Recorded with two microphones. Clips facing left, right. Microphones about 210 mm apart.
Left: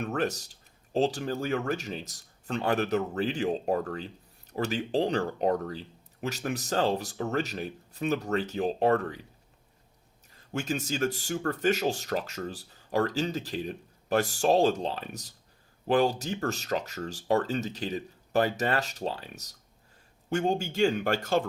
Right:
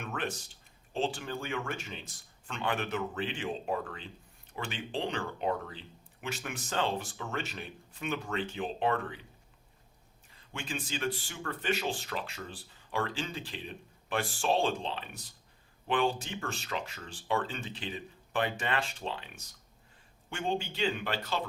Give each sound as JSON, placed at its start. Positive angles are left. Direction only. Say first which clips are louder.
{"t": 0.0, "sound": "speech", "louder": "left 7 dB", "side_deg": 40}
{"t": 10.3, "sound": "speech", "louder": "left 8 dB", "side_deg": 40}